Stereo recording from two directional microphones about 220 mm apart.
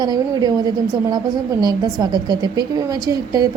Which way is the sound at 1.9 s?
20° right (ahead or behind).